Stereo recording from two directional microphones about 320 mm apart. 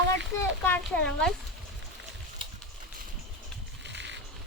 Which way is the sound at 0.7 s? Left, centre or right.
Centre.